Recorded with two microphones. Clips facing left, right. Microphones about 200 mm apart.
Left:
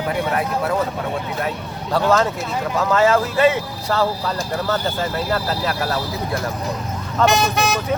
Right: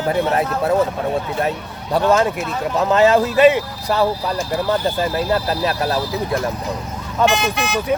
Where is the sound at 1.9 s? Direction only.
15° right (ahead or behind).